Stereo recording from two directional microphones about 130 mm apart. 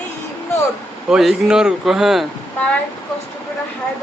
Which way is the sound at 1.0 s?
5° right (ahead or behind).